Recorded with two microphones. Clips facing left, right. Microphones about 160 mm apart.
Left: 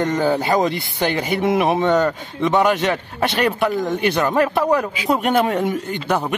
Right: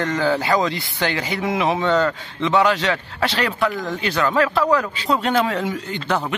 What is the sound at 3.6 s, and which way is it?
A man's voice, 20° left (ahead or behind).